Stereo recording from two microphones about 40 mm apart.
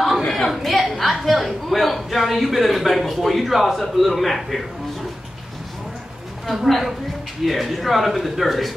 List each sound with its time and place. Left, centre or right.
0.3 s a man's voice: centre
6.4 s a man's voice: centre